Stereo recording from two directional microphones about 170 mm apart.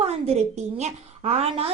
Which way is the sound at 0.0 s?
35° right (ahead or behind).